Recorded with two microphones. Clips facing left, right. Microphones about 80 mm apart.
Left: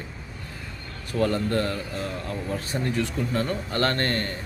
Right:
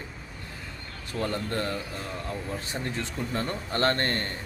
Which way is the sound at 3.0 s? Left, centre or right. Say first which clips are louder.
Left 5 dB; right.